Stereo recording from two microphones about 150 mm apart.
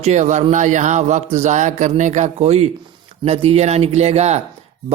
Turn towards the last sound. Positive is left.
turn(degrees=-45)  # may be behind; listen again after turning